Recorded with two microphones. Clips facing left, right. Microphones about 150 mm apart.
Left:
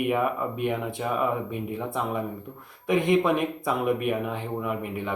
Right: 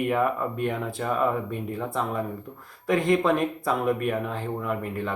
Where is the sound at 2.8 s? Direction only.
5° left (ahead or behind).